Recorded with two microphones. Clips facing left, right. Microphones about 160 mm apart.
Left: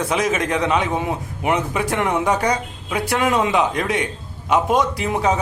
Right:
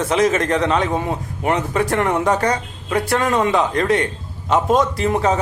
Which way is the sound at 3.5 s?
15° left (ahead or behind).